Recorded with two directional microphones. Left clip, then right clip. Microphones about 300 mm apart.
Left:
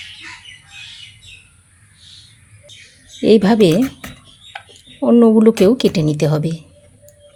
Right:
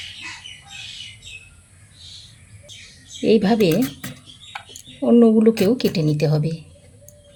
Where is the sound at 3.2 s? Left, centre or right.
Centre.